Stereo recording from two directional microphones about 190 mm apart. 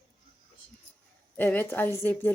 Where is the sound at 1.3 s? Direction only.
10° left (ahead or behind).